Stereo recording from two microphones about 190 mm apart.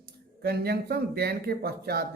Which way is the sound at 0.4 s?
55° right (ahead or behind).